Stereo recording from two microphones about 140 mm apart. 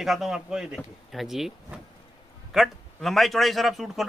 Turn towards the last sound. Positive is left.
turn(degrees=0)  # may be behind; listen again after turning